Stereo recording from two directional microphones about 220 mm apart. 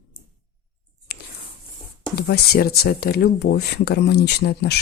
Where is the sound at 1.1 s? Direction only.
45° left (ahead or behind).